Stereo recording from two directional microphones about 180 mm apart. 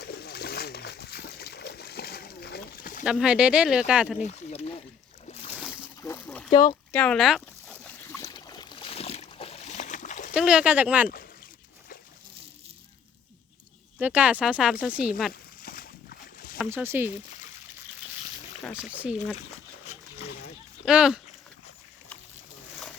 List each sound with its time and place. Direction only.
0.0 s a sound: 65° left (ahead or behind)
3.0 s speech: centre (ahead or behind)
4.2 s boat: 35° left (ahead or behind)
6.0 s a sound: 10° left (ahead or behind)
6.5 s speech: 25° left (ahead or behind)
6.9 s speech: 5° left (ahead or behind)
8.3 s boat: 25° left (ahead or behind); by 10.3 s 45° left (ahead or behind)
10.3 s speech: 5° right (ahead or behind)
14.0 s speech: 10° right (ahead or behind)
15.3 s a sound: 55° left (ahead or behind)
16.6 s speech: 15° right (ahead or behind)
18.7 s speech: 5° right (ahead or behind)
20.8 s speech: 5° right (ahead or behind)